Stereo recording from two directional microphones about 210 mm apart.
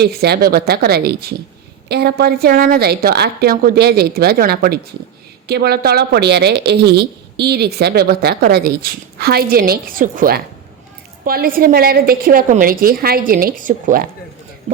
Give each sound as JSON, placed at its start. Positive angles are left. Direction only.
{"t": 0.0, "sound": "a woman's voice", "side_deg": -50}